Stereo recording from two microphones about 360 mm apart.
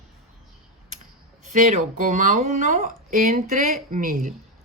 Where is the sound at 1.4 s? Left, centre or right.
Right.